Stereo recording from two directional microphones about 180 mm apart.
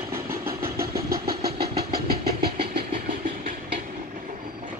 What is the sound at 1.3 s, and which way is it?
Vehicle, 60° right (ahead or behind).